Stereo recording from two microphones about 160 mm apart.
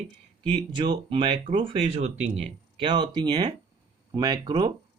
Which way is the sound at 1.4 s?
55° right (ahead or behind).